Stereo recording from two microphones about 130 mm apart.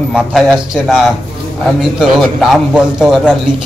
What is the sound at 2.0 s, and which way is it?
A man's voice, 5° right (ahead or behind).